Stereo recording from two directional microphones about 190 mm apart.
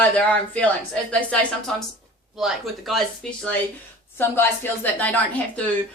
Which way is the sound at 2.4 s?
Centre (ahead or behind).